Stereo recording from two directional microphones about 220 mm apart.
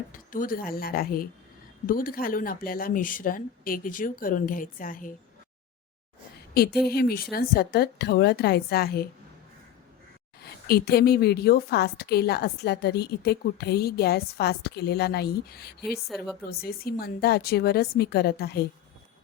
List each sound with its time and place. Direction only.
0.1 s speech: 40° left (ahead or behind)
6.5 s a woman's voice: 45° left (ahead or behind)
10.4 s a woman's voice: 45° left (ahead or behind)
15.8 s speech: centre (ahead or behind)
16.5 s a woman's voice: 45° left (ahead or behind)